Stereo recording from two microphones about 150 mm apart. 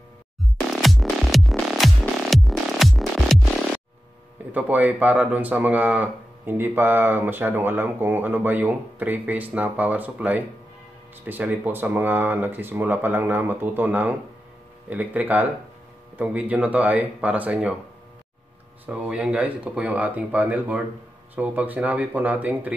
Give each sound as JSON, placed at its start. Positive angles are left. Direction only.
{"t": 0.4, "sound": "music", "side_deg": 0}
{"t": 4.5, "sound": "speech", "side_deg": -10}
{"t": 18.9, "sound": "speech", "side_deg": -5}